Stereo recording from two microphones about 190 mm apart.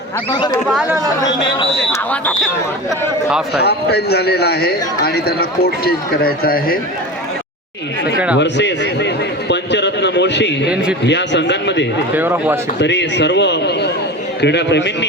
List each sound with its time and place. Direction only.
0.3 s speech: 25° left (ahead or behind)
0.7 s speech: 5° right (ahead or behind)
1.2 s speech: 15° left (ahead or behind)
3.5 s a man's voice: 60° left (ahead or behind)
8.4 s a man's voice: 65° left (ahead or behind)
12.1 s speech: 10° right (ahead or behind)
12.8 s a man's voice: 65° left (ahead or behind)